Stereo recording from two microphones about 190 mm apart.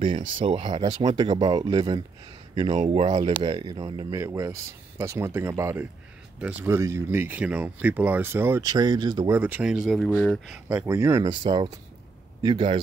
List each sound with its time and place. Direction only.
0.4 s speech: 30° right (ahead or behind)
4.1 s speech: 15° right (ahead or behind)
9.3 s speech: 10° right (ahead or behind)
10.7 s speech: 10° right (ahead or behind)
11.2 s speech: 25° right (ahead or behind)